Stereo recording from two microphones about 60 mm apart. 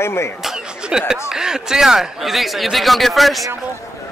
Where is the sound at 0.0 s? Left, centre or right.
Left.